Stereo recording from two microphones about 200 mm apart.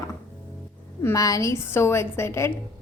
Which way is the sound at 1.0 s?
15° left (ahead or behind).